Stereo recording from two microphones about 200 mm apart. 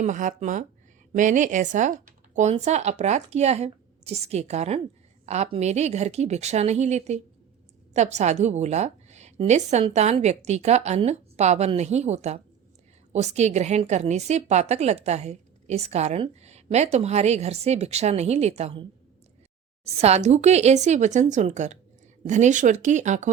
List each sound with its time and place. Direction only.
0.0 s a woman's voice: 40° right (ahead or behind)